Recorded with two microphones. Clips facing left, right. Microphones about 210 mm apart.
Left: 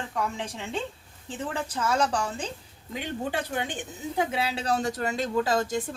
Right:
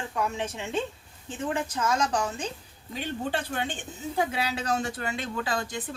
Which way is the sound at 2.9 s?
10° left (ahead or behind).